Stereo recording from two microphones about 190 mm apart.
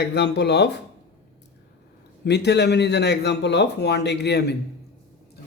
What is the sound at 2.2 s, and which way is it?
Speech, 65° left (ahead or behind).